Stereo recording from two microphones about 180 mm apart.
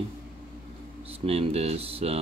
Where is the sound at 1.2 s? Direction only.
35° right (ahead or behind).